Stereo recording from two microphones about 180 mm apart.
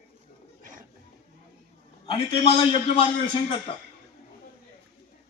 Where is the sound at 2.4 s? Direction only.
35° left (ahead or behind).